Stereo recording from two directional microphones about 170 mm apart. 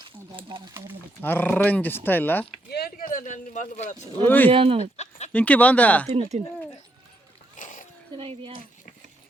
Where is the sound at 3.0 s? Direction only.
50° left (ahead or behind).